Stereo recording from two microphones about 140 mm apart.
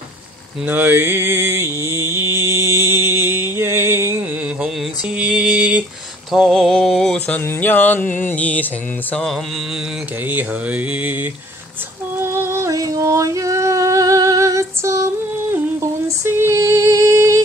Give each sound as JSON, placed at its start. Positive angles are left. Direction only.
{"t": 0.7, "sound": "music", "side_deg": -15}
{"t": 8.3, "sound": "mantra", "side_deg": 10}
{"t": 9.1, "sound": "music", "side_deg": 5}
{"t": 10.2, "sound": "mantra", "side_deg": -10}
{"t": 12.2, "sound": "music", "side_deg": -20}
{"t": 16.3, "sound": "a sound", "side_deg": -20}